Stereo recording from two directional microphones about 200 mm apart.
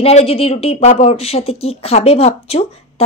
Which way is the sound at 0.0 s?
30° left (ahead or behind).